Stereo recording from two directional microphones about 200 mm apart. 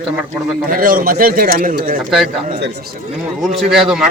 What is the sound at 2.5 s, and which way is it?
Speech, 55° right (ahead or behind).